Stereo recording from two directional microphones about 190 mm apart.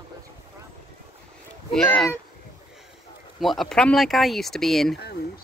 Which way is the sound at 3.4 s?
Centre (ahead or behind).